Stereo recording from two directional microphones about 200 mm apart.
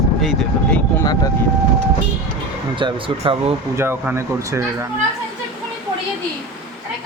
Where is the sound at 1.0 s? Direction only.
20° left (ahead or behind).